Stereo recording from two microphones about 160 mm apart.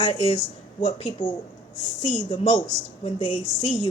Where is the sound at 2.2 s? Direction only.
30° left (ahead or behind).